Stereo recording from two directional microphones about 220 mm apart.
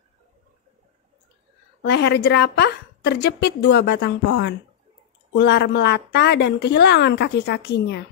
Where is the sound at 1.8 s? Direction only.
50° left (ahead or behind).